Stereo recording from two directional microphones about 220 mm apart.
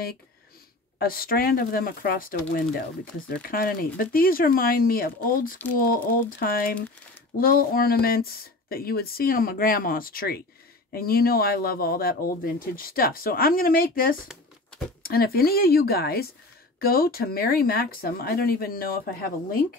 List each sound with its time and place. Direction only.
0.9 s speech: 40° left (ahead or behind)
14.2 s a sound: centre (ahead or behind)
15.0 s speech: 45° left (ahead or behind)